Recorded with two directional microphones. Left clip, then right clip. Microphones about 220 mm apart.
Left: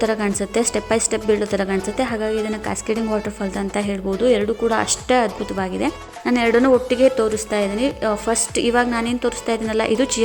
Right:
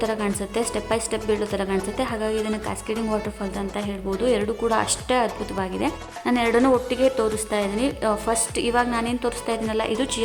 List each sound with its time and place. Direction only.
0.0 s speech: 15° left (ahead or behind)